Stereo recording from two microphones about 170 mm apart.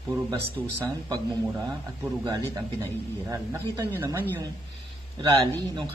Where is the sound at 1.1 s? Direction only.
25° right (ahead or behind).